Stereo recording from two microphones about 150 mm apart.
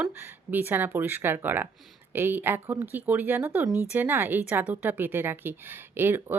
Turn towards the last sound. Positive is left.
turn(degrees=-15)  # may be behind; listen again after turning